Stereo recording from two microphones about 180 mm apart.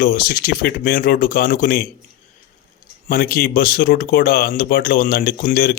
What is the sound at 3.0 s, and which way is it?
A man's voice, 55° left (ahead or behind).